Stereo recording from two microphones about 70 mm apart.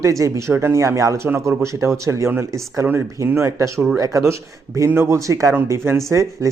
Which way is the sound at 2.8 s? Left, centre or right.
Right.